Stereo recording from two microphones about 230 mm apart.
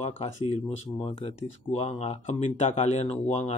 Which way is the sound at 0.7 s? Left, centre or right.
Left.